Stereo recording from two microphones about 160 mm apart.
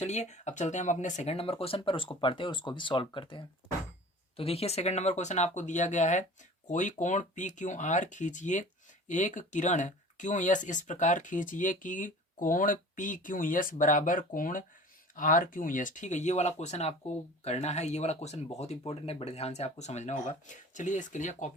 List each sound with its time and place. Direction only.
0.0 s speech: 45° left (ahead or behind)